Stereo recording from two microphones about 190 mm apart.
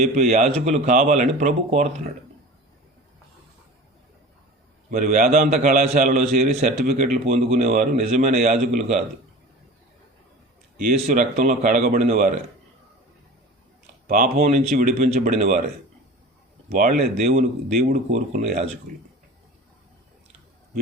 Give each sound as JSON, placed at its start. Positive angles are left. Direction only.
{"t": 0.0, "sound": "a man's voice", "side_deg": -35}
{"t": 4.9, "sound": "a man's voice", "side_deg": -40}
{"t": 10.9, "sound": "a man's voice", "side_deg": -35}
{"t": 14.1, "sound": "speech", "side_deg": -45}
{"t": 14.4, "sound": "a man's voice", "side_deg": -35}
{"t": 16.6, "sound": "a man's voice", "side_deg": -45}